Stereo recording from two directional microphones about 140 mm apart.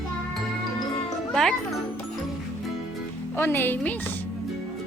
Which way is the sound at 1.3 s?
5° left (ahead or behind).